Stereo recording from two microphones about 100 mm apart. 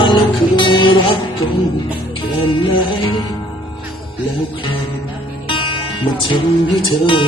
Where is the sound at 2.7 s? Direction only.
60° left (ahead or behind).